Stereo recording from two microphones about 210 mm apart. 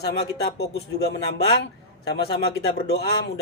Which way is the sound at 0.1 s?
50° left (ahead or behind).